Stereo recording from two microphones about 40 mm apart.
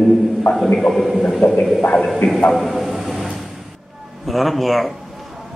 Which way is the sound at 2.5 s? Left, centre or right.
Centre.